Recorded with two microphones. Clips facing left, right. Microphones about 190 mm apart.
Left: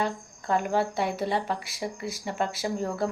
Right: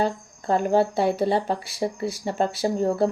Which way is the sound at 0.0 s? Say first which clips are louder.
Right 5 dB; 30° right (ahead or behind).